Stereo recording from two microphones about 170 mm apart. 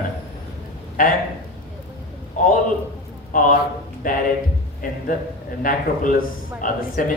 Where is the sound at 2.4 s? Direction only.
45° left (ahead or behind).